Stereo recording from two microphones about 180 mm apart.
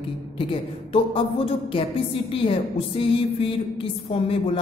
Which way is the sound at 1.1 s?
30° left (ahead or behind).